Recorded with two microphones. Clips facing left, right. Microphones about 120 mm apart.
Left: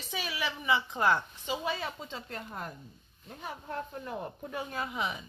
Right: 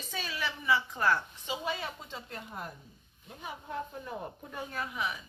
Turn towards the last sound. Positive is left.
turn(degrees=25)  # may be behind; listen again after turning